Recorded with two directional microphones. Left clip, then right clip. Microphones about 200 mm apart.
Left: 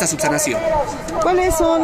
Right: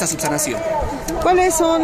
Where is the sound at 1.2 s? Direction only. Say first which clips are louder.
Right 1 dB; 10° right (ahead or behind).